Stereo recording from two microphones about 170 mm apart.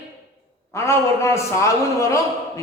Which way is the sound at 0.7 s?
15° left (ahead or behind).